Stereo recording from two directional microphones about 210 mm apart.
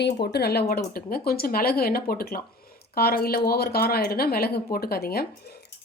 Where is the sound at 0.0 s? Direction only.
50° left (ahead or behind).